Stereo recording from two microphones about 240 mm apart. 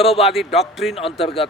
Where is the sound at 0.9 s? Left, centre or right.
Left.